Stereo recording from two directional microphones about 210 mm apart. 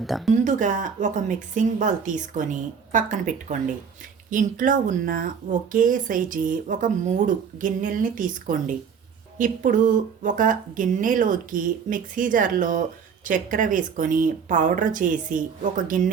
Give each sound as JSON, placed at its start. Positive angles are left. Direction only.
{"t": 0.0, "sound": "speech", "side_deg": 0}
{"t": 0.4, "sound": "speech", "side_deg": -35}